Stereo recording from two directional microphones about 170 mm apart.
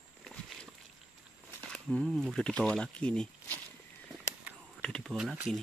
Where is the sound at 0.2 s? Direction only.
Centre (ahead or behind).